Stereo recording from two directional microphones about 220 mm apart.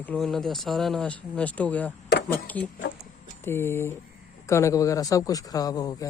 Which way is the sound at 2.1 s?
50° left (ahead or behind).